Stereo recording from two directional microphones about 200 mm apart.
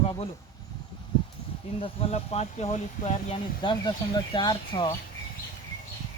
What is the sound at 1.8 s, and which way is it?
Speech, 30° left (ahead or behind).